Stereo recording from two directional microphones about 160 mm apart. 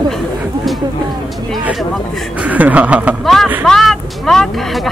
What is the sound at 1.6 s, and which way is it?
Speech, centre (ahead or behind).